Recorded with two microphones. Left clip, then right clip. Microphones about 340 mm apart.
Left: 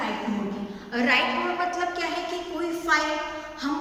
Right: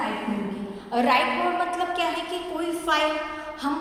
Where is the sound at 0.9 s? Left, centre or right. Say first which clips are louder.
Right 2 dB; centre.